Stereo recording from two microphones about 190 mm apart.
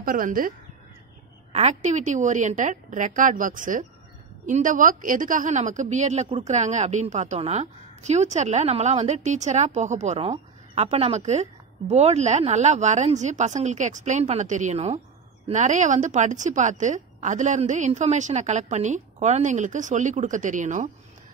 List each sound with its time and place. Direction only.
0.0 s speech: 45° right (ahead or behind)
1.5 s a woman's voice: 35° right (ahead or behind)